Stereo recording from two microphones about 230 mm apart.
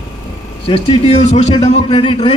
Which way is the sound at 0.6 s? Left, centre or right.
Left.